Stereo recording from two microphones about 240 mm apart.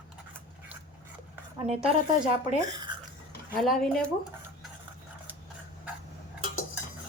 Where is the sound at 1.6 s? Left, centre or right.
Right.